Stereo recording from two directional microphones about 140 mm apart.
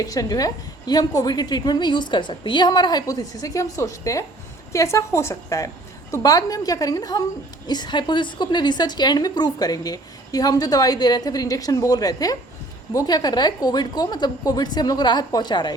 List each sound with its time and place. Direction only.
0.0 s a woman's voice: 25° left (ahead or behind)